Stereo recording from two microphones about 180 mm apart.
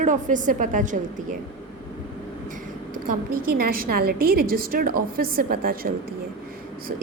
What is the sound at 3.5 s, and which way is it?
A woman's voice, 55° right (ahead or behind).